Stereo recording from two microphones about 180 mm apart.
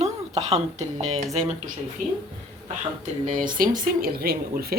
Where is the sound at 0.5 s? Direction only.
40° right (ahead or behind).